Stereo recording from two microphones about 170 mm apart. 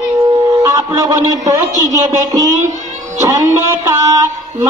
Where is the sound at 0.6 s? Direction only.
20° right (ahead or behind).